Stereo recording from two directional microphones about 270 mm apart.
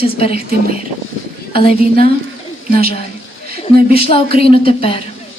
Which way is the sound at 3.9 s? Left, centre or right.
Left.